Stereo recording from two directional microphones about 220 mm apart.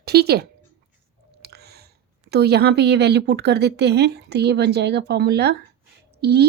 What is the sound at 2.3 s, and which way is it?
A woman's voice, 45° right (ahead or behind).